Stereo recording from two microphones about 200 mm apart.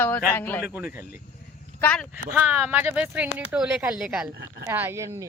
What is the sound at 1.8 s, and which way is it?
Speech, 5° left (ahead or behind).